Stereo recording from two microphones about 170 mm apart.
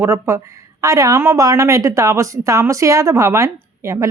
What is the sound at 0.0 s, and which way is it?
A woman's voice, 15° right (ahead or behind).